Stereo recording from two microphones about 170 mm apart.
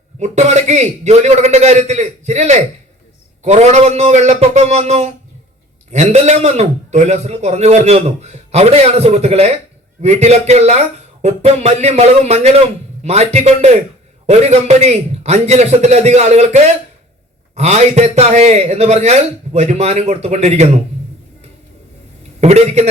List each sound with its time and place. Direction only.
0.2 s a man's voice: 40° right (ahead or behind)
22.4 s a man's voice: 40° right (ahead or behind)